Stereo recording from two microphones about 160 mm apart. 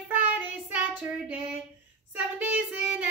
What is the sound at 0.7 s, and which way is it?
Female singing, 10° right (ahead or behind).